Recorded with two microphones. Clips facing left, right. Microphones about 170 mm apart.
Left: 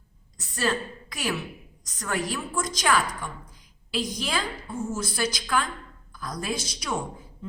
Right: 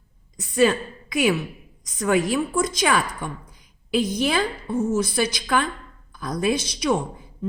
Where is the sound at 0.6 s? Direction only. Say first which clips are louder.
Right 8 dB; 60° right (ahead or behind).